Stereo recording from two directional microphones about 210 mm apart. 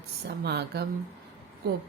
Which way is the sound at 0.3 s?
50° right (ahead or behind).